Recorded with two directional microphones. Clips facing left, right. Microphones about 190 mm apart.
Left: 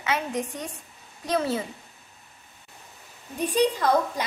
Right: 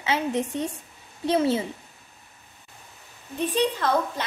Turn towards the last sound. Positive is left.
turn(degrees=10)  # may be behind; listen again after turning